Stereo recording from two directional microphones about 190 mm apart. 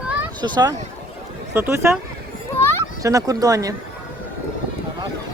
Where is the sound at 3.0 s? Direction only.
20° right (ahead or behind).